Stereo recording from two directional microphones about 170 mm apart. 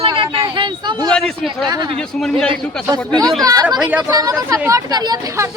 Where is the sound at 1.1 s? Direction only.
Centre (ahead or behind).